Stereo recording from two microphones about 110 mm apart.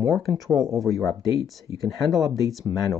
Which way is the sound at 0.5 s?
30° right (ahead or behind).